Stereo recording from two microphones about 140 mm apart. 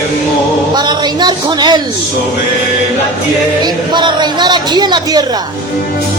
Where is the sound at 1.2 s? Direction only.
30° right (ahead or behind).